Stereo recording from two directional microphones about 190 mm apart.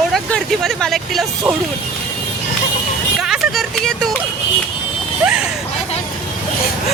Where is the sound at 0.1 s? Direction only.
Centre (ahead or behind).